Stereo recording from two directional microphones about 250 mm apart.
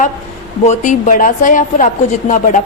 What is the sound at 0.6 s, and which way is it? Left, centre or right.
A woman's voice, left.